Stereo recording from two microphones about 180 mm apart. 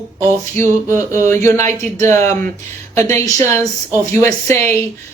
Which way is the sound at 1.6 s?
40° right (ahead or behind).